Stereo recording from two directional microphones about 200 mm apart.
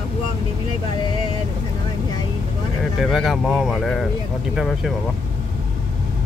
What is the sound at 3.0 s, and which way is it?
Speech, centre (ahead or behind).